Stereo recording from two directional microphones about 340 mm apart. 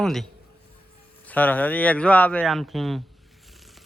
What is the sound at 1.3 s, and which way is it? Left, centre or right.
Speech, centre.